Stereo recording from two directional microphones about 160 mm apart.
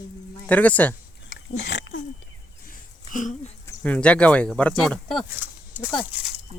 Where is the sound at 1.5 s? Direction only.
90° left.